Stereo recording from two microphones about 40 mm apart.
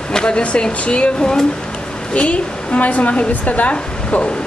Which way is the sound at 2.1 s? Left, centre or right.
Left.